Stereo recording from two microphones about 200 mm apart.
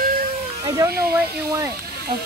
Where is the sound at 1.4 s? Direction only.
15° right (ahead or behind).